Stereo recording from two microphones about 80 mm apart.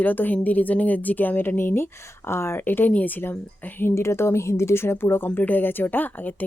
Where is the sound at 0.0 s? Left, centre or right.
Left.